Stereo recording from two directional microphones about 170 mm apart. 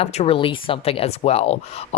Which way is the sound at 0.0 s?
40° left (ahead or behind).